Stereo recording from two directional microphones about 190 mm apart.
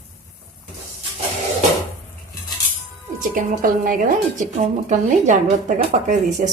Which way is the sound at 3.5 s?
45° right (ahead or behind).